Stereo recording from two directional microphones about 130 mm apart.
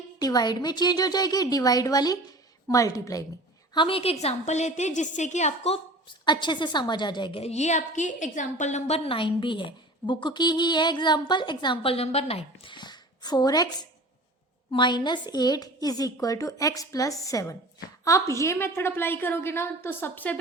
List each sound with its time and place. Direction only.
0.2 s a woman's voice: 30° left (ahead or behind)
3.8 s a woman's voice: 45° left (ahead or behind)
6.2 s a woman's voice: 35° left (ahead or behind); by 9.0 s 65° left (ahead or behind)
9.0 s a woman's voice: 40° left (ahead or behind); by 20.4 s 15° left (ahead or behind)